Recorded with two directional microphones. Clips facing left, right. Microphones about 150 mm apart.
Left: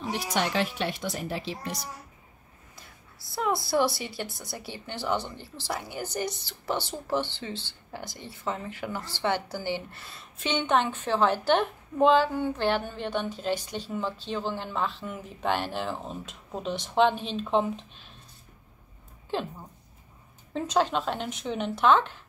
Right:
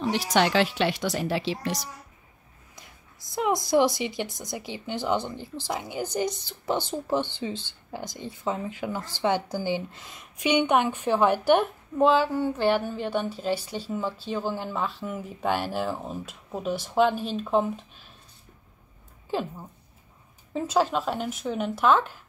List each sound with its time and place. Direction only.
0.0 s speech: 90° right
3.3 s a woman's voice: 15° right (ahead or behind)
19.3 s a woman's voice: 10° right (ahead or behind)
20.5 s speech: 5° right (ahead or behind)